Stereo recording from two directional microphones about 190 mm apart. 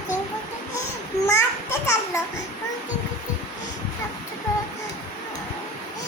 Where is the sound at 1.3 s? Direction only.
15° left (ahead or behind).